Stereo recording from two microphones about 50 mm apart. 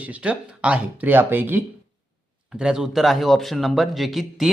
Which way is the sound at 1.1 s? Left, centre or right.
Right.